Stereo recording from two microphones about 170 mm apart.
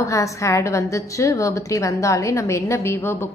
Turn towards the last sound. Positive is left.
turn(degrees=15)  # may be behind; listen again after turning